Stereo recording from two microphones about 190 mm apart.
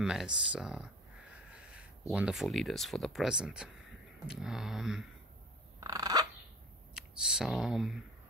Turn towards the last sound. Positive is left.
turn(degrees=0)  # may be behind; listen again after turning